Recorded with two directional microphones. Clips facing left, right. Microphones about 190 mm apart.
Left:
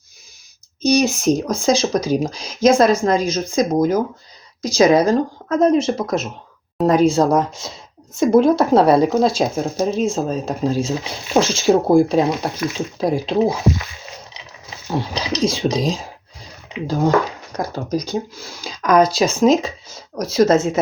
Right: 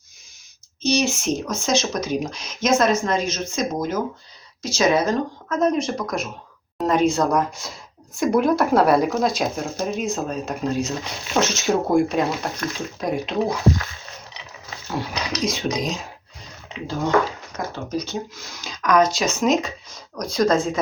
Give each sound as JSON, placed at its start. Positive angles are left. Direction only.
{"t": 1.0, "sound": "speech", "side_deg": 35}
{"t": 14.8, "sound": "speech", "side_deg": 30}